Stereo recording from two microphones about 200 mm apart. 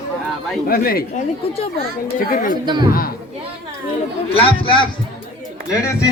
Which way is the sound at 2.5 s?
20° right (ahead or behind).